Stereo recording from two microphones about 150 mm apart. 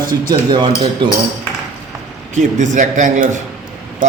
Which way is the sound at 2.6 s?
55° right (ahead or behind).